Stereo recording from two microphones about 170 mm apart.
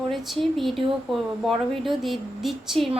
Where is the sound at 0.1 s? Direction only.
Centre (ahead or behind).